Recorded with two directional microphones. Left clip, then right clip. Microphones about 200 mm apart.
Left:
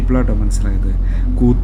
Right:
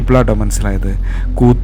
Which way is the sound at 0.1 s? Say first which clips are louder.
Right 8 dB; 35° right (ahead or behind).